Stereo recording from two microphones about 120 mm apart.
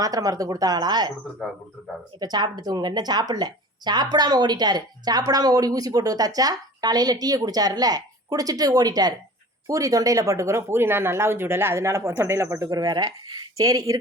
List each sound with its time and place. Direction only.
0.0 s speech: 30° right (ahead or behind)
2.1 s speech: 35° right (ahead or behind)